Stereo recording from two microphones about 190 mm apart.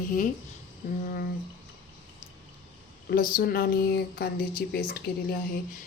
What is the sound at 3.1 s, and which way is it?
Speech, 50° left (ahead or behind).